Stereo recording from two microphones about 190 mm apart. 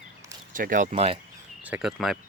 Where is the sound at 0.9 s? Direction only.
30° right (ahead or behind).